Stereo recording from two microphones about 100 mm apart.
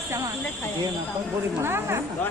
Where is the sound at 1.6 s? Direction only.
25° right (ahead or behind).